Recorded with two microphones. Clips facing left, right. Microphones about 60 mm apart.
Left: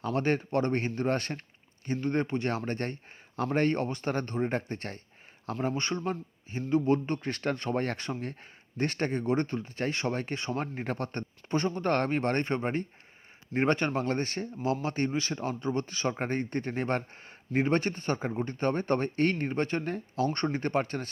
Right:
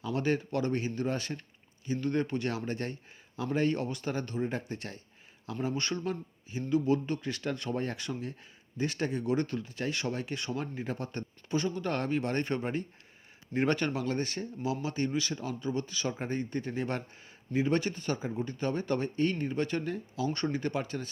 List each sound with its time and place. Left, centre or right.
0.0 s speech: left
2.0 s speech: left
5.7 s speech: left
19.5 s speech: left